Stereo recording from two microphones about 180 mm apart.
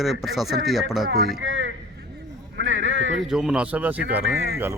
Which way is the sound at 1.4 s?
90° right.